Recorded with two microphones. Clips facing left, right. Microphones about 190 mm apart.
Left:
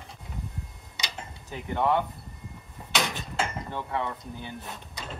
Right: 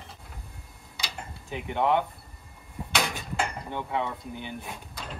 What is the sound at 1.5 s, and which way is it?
Speech, 15° right (ahead or behind).